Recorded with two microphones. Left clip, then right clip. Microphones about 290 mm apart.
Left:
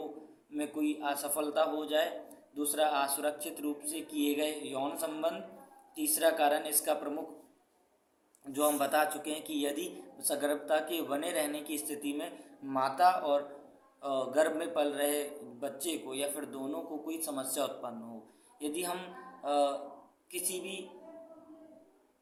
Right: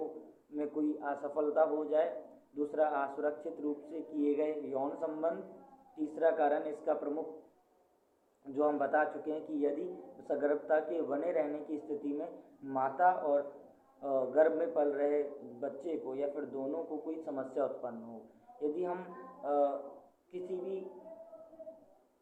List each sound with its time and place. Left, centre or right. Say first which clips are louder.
0.5 s a man's voice: left 1 dB; centre
8.5 s a man's voice: left 1 dB; left